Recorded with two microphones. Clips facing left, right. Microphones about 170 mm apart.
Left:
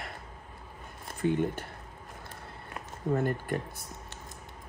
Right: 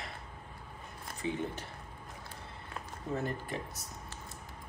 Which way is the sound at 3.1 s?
60° left (ahead or behind).